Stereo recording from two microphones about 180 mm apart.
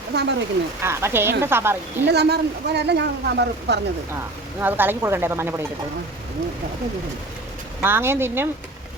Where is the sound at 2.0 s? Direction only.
65° right (ahead or behind).